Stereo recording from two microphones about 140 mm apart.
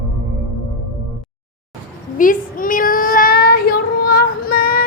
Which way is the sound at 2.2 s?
75° left (ahead or behind).